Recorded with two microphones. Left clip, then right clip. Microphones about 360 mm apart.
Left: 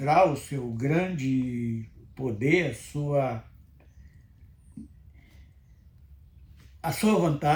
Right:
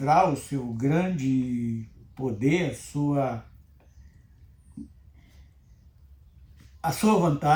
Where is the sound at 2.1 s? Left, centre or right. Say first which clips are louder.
Left 1 dB; right.